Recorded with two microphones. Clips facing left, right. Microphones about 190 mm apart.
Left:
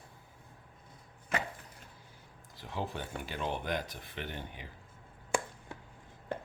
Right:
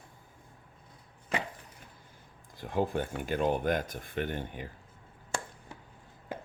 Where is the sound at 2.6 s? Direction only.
50° right (ahead or behind).